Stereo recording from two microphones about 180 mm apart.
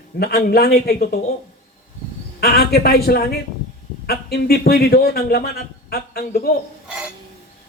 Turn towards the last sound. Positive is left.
turn(degrees=60)  # may be behind; listen again after turning